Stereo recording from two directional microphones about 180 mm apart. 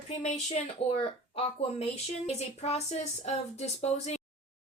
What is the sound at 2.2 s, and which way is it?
Speech, 35° left (ahead or behind).